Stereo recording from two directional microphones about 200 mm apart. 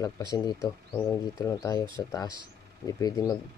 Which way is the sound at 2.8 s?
15° left (ahead or behind).